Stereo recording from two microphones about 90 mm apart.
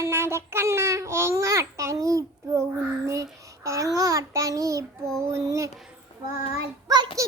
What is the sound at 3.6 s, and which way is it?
Child singing, 40° right (ahead or behind).